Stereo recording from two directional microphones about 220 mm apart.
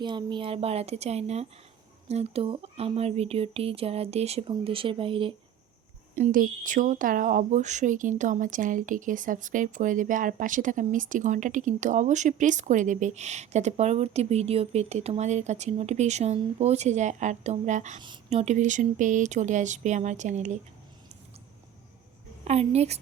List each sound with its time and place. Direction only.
0.0 s speech: 20° right (ahead or behind)
6.1 s speech: 35° right (ahead or behind)
22.4 s speech: 30° right (ahead or behind)